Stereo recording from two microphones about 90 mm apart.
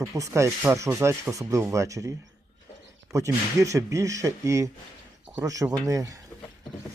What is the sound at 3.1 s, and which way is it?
Speech, 35° right (ahead or behind).